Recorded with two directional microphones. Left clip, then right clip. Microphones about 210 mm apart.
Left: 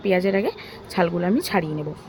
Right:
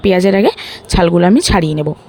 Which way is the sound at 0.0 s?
45° right (ahead or behind).